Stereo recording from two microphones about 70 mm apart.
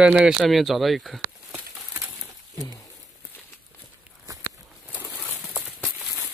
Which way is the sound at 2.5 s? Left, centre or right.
Left.